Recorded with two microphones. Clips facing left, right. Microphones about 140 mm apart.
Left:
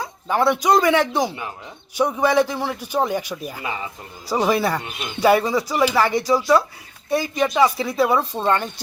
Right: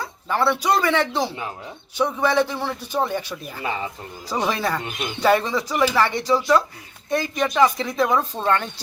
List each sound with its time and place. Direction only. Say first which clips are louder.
0.0 s speech: left 2 dB; 15° left (ahead or behind)